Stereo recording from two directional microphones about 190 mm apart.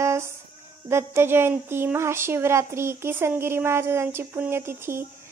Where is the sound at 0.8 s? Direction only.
15° right (ahead or behind).